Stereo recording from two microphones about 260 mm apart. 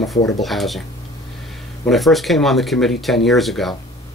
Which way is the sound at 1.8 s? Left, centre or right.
Centre.